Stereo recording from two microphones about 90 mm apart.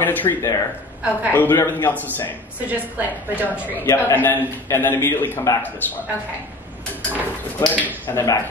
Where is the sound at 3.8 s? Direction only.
30° left (ahead or behind).